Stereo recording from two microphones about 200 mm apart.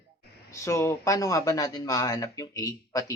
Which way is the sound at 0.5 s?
15° left (ahead or behind).